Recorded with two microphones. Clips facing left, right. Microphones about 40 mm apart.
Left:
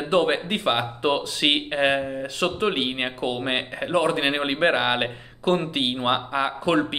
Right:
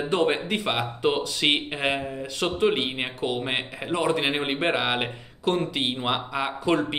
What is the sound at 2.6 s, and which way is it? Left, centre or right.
Speech, centre.